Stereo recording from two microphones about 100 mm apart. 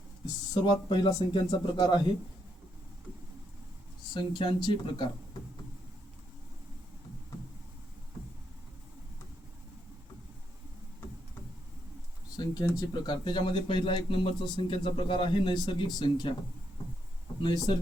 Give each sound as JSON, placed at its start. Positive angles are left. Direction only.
{"t": 0.5, "sound": "speech", "side_deg": 50}
{"t": 4.1, "sound": "speech", "side_deg": 50}
{"t": 12.4, "sound": "speech", "side_deg": 45}
{"t": 17.4, "sound": "speech", "side_deg": 45}